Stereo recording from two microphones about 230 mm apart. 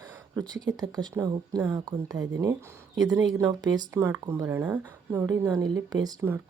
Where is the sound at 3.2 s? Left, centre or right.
Centre.